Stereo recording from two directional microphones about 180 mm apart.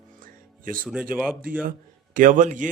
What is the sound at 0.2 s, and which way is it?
Music, 50° right (ahead or behind).